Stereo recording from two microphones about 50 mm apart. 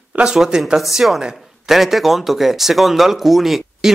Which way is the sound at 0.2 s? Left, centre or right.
Centre.